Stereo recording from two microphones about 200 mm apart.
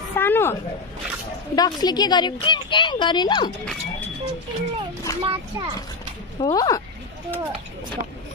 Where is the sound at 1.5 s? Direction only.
20° left (ahead or behind).